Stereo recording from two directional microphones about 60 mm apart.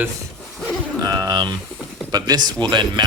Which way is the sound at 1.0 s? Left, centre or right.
Right.